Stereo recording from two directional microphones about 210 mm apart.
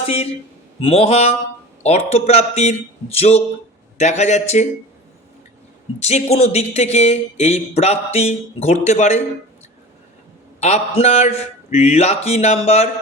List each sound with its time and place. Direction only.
0.0 s a man's voice: 30° left (ahead or behind)
6.0 s speech: 30° left (ahead or behind)
10.6 s speech: 30° left (ahead or behind)